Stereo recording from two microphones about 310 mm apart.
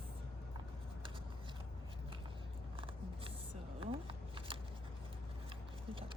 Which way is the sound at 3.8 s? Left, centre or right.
Centre.